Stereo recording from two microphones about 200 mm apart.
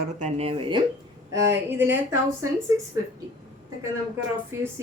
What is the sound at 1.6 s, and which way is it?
Speech, 10° right (ahead or behind).